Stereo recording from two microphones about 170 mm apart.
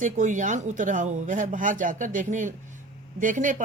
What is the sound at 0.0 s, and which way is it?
Speech, 45° right (ahead or behind).